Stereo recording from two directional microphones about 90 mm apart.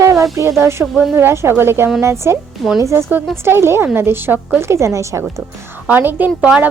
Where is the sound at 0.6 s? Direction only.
30° right (ahead or behind).